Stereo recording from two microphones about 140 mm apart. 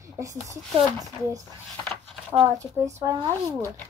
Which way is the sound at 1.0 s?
25° right (ahead or behind).